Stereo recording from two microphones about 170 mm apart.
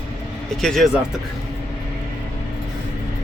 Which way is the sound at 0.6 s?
Centre (ahead or behind).